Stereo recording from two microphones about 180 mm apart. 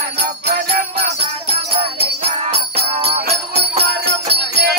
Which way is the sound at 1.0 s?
35° right (ahead or behind).